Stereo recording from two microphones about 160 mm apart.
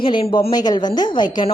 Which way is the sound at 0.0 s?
30° left (ahead or behind).